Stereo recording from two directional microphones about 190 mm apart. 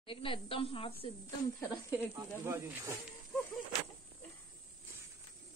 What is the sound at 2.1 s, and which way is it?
Speech, 15° right (ahead or behind).